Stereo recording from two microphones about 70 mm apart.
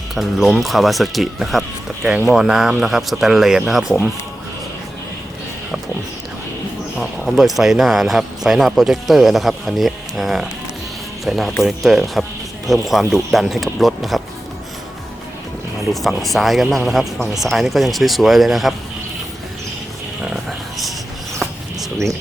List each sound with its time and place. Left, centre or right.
0.1 s speech: centre
7.3 s speech: centre
15.9 s speech: centre
20.2 s a sound: centre